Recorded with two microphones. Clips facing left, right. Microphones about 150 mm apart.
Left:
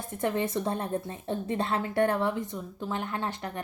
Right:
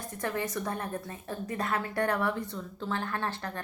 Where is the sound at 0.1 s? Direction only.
20° left (ahead or behind).